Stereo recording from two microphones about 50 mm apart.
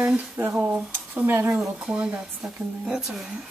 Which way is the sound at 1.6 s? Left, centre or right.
Centre.